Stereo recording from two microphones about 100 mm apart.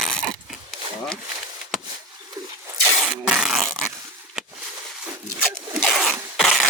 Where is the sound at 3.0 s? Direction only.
5° right (ahead or behind).